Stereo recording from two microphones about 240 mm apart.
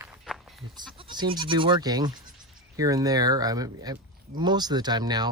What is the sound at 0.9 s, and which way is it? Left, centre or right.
Speech, centre.